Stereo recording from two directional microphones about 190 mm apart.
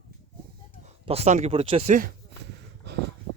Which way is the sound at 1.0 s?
35° right (ahead or behind).